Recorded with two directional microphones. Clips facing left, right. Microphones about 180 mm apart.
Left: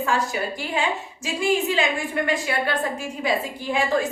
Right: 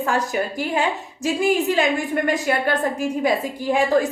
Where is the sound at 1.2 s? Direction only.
45° right (ahead or behind).